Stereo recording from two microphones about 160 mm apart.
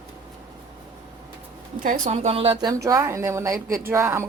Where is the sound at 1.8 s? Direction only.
55° right (ahead or behind); by 2.5 s 40° right (ahead or behind).